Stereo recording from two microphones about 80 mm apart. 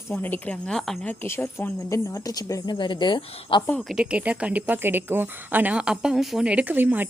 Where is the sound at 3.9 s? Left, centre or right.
Centre.